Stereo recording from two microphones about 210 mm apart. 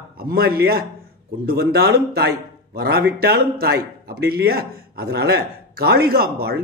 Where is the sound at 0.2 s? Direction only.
45° right (ahead or behind).